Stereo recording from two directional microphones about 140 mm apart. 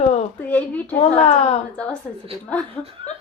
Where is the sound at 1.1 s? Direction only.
45° left (ahead or behind).